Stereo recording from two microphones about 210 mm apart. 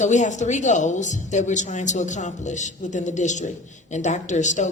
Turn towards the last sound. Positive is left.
turn(degrees=35)  # may be behind; listen again after turning